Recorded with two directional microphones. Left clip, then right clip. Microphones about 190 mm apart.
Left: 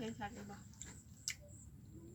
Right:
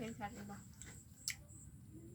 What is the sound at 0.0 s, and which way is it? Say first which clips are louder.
Snake: left 1 dB; 15° right (ahead or behind).